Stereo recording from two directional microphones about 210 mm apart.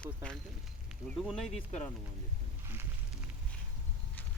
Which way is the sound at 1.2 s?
5° right (ahead or behind).